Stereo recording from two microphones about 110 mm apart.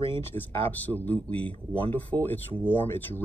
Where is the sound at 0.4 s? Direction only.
15° left (ahead or behind).